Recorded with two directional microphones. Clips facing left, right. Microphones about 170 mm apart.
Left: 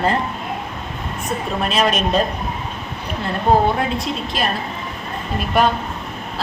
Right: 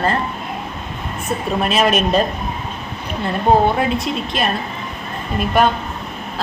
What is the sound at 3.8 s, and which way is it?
Speech, centre (ahead or behind).